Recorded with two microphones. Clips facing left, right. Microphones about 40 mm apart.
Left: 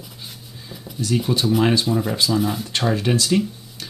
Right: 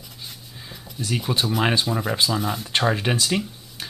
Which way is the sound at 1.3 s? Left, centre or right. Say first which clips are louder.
Left 3 dB; centre.